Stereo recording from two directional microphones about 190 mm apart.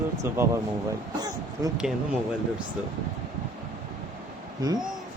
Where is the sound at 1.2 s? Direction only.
20° right (ahead or behind).